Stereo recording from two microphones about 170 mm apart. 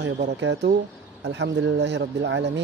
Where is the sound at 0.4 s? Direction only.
90° right.